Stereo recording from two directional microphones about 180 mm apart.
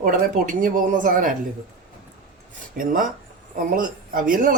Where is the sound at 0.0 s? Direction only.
50° right (ahead or behind).